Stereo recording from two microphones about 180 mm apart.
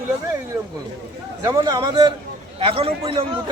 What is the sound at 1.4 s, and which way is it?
A man's voice, 20° right (ahead or behind).